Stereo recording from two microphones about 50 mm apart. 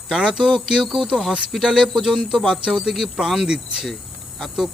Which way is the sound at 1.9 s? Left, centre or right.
Centre.